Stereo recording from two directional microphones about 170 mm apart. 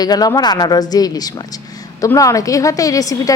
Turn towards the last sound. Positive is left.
turn(degrees=20)  # may be behind; listen again after turning